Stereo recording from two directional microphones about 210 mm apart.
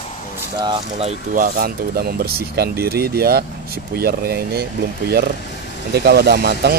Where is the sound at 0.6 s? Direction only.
25° right (ahead or behind).